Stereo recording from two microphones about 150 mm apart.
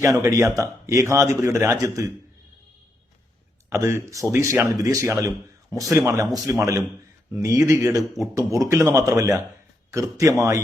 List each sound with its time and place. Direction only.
0.0 s speech: 20° right (ahead or behind)
3.7 s speech: 20° right (ahead or behind)